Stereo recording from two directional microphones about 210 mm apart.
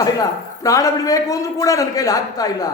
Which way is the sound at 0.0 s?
15° left (ahead or behind).